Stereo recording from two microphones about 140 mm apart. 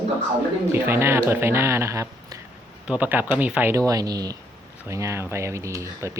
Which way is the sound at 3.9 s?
25° right (ahead or behind).